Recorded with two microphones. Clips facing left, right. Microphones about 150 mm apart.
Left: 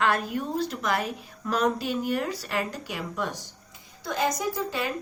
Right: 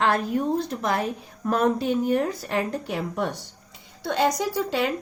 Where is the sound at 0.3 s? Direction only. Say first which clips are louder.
Right 4 dB; 25° right (ahead or behind).